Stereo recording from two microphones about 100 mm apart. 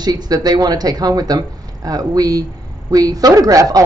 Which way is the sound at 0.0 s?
45° right (ahead or behind).